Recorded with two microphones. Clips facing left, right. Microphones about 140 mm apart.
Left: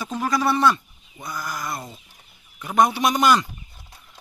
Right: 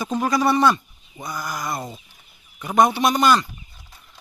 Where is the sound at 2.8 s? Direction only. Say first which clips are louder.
Right 1 dB; 5° left (ahead or behind).